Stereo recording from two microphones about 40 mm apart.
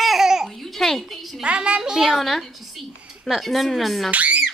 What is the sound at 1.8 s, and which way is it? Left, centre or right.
Speech, centre.